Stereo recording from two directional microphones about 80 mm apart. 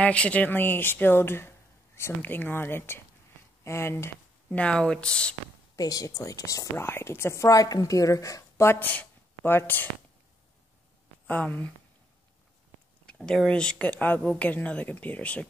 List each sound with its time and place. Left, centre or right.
0.0 s speech: centre; by 4.1 s left
4.5 s speech: centre
5.8 s a woman's voice: left
6.8 s speech: left
7.4 s a woman's voice: left
8.7 s speech: left
11.2 s speech: left
13.0 s speech: centre